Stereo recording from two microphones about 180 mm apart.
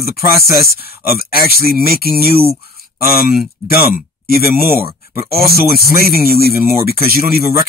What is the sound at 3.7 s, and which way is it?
Speech, 60° left (ahead or behind).